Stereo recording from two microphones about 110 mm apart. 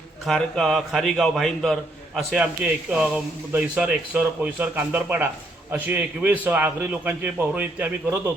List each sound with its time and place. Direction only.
0.3 s a man's voice: 5° left (ahead or behind)
2.3 s a man's voice: 10° right (ahead or behind)